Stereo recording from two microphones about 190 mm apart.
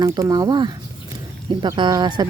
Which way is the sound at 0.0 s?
20° right (ahead or behind).